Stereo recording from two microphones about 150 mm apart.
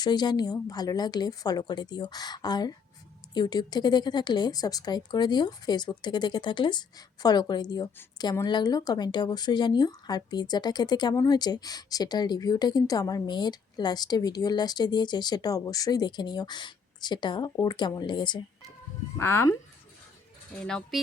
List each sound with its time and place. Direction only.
0.0 s speech: 30° left (ahead or behind)
19.1 s speech: 15° left (ahead or behind)
20.6 s speech: 5° left (ahead or behind)